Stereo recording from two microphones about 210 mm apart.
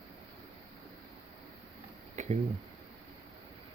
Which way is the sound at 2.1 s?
35° right (ahead or behind).